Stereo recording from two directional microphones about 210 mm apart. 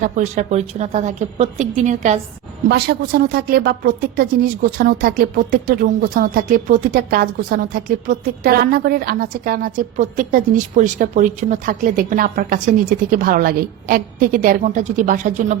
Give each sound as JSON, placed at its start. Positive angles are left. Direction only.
{"t": 0.0, "sound": "a woman's voice", "side_deg": -35}
{"t": 2.6, "sound": "speech", "side_deg": -50}